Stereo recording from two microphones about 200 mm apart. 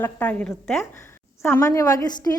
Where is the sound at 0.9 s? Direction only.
15° left (ahead or behind).